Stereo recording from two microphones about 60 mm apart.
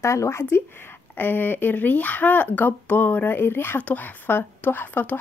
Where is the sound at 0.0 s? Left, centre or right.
Left.